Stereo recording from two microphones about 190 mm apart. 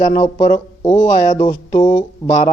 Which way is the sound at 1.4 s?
25° left (ahead or behind).